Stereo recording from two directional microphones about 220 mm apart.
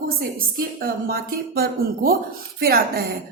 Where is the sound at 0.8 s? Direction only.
40° right (ahead or behind).